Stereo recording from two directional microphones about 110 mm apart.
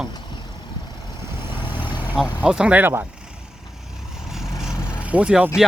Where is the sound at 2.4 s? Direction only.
10° right (ahead or behind).